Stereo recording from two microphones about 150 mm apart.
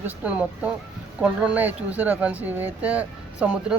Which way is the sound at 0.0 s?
10° right (ahead or behind).